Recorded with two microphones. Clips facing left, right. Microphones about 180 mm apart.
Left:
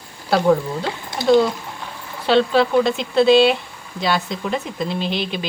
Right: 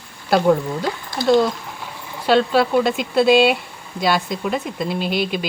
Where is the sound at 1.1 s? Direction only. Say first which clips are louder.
Left 1 dB; 20° left (ahead or behind).